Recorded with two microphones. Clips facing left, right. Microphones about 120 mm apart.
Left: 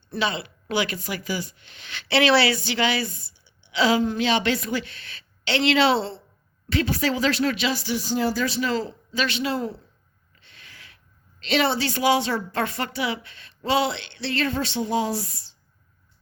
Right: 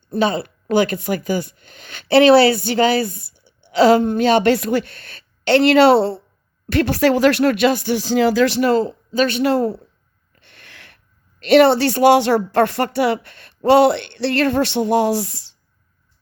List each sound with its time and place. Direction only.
0.1 s speech: 45° right (ahead or behind)
3.2 s a woman's voice: 55° right (ahead or behind)
7.9 s speech: 90° right; by 8.7 s 70° right (ahead or behind)
9.1 s speech: 50° right (ahead or behind)
10.3 s a sound: 60° right (ahead or behind)
11.3 s speech: 60° right (ahead or behind); by 15.5 s 90° right